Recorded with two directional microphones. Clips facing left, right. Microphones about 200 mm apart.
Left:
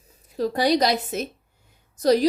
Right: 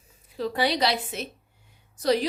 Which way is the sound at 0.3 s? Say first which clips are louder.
Left 5 dB; 40° left (ahead or behind).